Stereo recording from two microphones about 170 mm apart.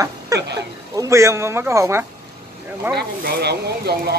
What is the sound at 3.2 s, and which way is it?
Speech, 65° right (ahead or behind).